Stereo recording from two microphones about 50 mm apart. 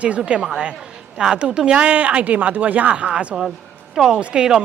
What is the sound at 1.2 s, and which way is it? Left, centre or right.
Speech, centre.